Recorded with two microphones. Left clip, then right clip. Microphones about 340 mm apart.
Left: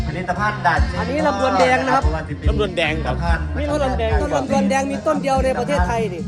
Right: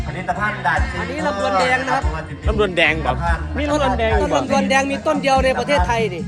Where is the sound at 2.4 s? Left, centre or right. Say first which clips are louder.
Right 4 dB; centre.